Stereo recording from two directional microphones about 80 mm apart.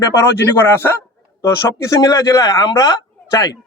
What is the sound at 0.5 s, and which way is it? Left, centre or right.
A man's voice, left.